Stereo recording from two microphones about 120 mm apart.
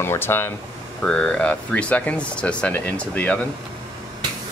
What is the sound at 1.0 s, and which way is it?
Speech, 10° left (ahead or behind).